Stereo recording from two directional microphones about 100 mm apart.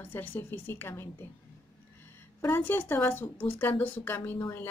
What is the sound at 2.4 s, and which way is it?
Speech, 20° left (ahead or behind).